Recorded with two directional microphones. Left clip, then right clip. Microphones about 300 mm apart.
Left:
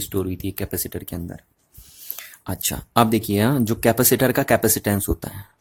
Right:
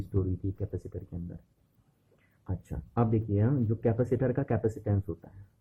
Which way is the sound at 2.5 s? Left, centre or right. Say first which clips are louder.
Left 15 dB; left.